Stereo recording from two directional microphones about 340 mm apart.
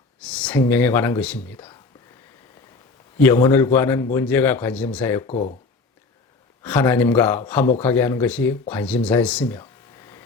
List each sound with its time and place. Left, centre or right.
0.2 s a man's voice: centre
3.2 s a man's voice: centre
5.2 s speech: centre
6.6 s a man's voice: centre